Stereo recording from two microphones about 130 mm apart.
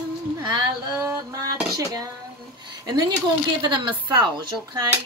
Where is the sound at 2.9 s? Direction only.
35° right (ahead or behind).